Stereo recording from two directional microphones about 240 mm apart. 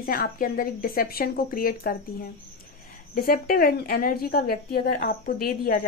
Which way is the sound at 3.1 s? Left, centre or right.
Left.